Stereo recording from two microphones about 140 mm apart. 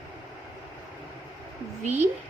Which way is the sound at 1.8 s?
55° right (ahead or behind).